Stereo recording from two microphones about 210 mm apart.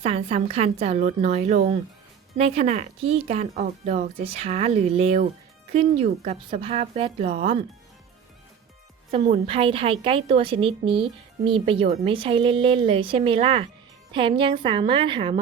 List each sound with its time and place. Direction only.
0.0 s a woman's voice: 30° right (ahead or behind)
9.1 s a woman's voice: 30° right (ahead or behind)